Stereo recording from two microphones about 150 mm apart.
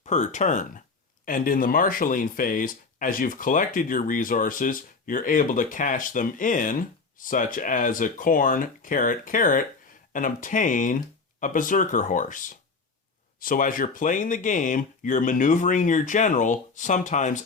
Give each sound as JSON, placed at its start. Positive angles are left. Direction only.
{"t": 0.0, "sound": "speech", "side_deg": 50}
{"t": 1.2, "sound": "speech", "side_deg": 70}